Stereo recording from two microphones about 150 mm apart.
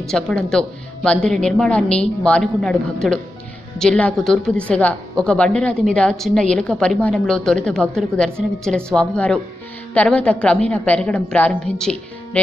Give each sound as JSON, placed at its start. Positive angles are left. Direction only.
{"t": 0.1, "sound": "a woman's voice", "side_deg": 5}